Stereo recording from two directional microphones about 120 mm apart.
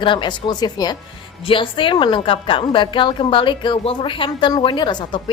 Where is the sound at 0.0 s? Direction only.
40° left (ahead or behind).